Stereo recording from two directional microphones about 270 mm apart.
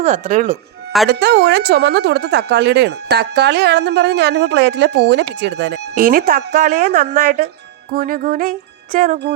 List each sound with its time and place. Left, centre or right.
0.0 s speech: right
1.1 s speech: right